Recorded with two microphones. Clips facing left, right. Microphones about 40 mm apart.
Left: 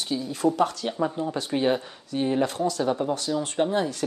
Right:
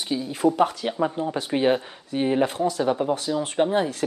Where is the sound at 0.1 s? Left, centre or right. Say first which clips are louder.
Right 3 dB; centre.